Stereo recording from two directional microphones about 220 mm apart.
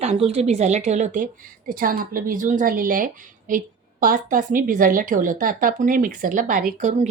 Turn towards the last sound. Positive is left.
turn(degrees=-35)  # may be behind; listen again after turning